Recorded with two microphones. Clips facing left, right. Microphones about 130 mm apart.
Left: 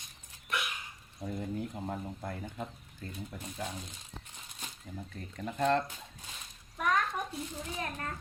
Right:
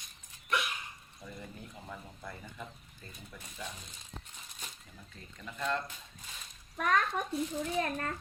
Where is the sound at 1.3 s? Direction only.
50° left (ahead or behind).